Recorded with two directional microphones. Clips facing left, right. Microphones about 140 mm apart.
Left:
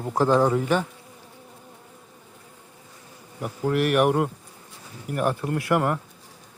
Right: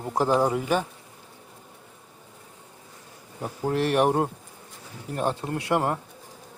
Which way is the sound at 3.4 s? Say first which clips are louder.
Left 2 dB; 25° right (ahead or behind).